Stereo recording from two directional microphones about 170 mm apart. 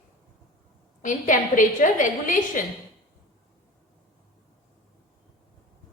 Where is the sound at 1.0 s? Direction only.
50° left (ahead or behind).